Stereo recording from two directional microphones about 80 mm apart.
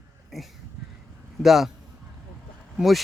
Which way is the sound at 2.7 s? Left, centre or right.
Centre.